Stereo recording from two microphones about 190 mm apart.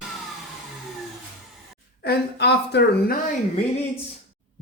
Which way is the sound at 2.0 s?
60° left (ahead or behind).